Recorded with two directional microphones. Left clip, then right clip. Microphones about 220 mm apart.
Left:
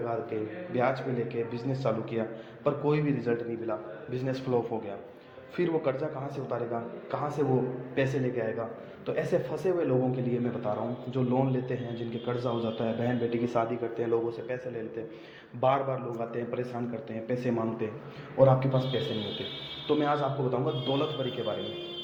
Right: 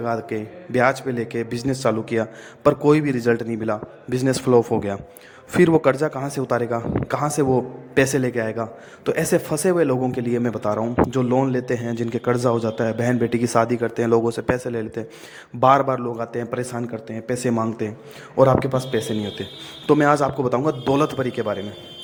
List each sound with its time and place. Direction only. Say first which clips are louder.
0.0 s a man's voice: right 7 dB; 50° right (ahead or behind)